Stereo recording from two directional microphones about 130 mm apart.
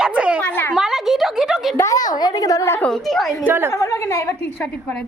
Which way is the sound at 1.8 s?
25° left (ahead or behind).